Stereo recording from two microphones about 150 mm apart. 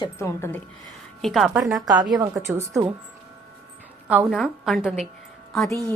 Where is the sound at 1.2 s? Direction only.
Centre (ahead or behind).